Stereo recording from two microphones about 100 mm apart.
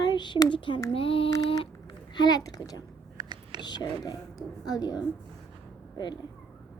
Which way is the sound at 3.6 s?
45° left (ahead or behind).